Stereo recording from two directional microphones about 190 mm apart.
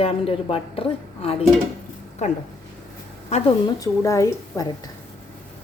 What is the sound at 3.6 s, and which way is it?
A woman's voice, 20° left (ahead or behind).